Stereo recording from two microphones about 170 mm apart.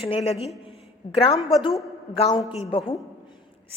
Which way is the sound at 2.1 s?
35° left (ahead or behind).